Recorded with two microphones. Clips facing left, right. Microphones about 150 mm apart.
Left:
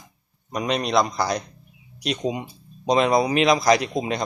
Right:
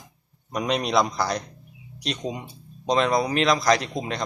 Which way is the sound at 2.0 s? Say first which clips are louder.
Left 4 dB; 10° left (ahead or behind).